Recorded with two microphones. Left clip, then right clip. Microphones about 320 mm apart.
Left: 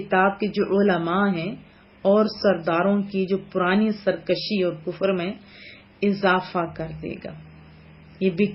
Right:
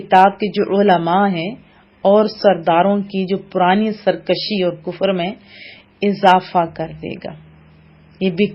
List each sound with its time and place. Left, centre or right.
0.1 s speech: right